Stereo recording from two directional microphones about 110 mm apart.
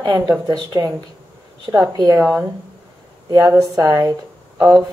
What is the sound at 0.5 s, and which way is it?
Speech, 35° right (ahead or behind).